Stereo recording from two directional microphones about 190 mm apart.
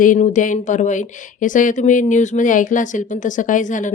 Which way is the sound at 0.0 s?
40° left (ahead or behind).